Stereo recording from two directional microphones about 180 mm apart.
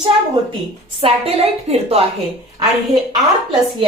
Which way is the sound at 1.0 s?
35° right (ahead or behind).